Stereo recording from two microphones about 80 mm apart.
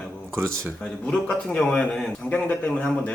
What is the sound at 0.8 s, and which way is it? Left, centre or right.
A man's voice, centre.